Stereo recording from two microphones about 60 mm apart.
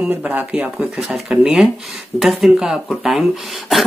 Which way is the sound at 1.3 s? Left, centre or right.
Centre.